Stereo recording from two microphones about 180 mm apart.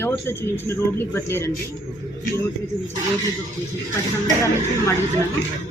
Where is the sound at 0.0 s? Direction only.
10° left (ahead or behind).